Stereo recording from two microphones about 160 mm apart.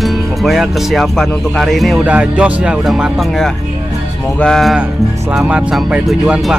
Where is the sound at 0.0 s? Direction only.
Centre (ahead or behind).